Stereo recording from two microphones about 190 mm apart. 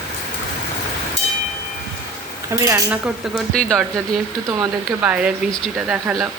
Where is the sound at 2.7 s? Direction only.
15° right (ahead or behind).